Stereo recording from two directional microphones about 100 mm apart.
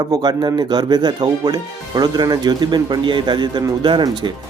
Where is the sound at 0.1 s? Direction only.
40° right (ahead or behind).